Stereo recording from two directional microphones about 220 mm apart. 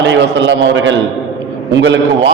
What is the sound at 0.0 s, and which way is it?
A man's voice, 55° right (ahead or behind).